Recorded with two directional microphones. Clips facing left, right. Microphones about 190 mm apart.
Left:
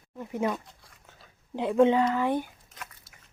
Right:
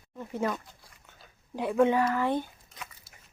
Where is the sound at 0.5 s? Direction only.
Centre (ahead or behind).